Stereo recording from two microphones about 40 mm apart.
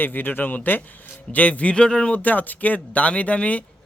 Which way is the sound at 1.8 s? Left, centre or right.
Left.